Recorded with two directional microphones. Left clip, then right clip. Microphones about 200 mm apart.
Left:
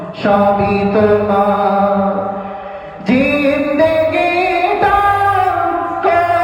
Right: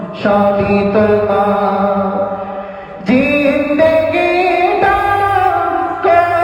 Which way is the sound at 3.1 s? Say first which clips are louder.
Right 1 dB; 30° right (ahead or behind).